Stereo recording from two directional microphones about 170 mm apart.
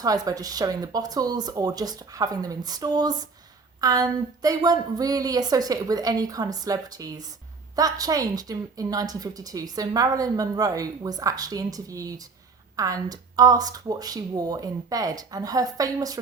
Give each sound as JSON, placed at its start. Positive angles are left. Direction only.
{"t": 0.0, "sound": "a woman's voice", "side_deg": -20}